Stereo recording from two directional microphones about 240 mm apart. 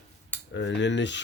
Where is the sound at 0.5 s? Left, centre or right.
Left.